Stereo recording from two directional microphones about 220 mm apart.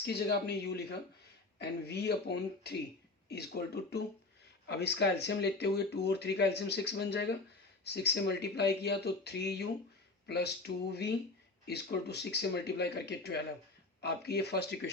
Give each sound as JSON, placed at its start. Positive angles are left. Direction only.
{"t": 0.0, "sound": "speech", "side_deg": 50}